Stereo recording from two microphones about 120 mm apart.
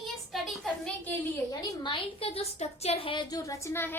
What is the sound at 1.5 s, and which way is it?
A woman's voice, 35° left (ahead or behind).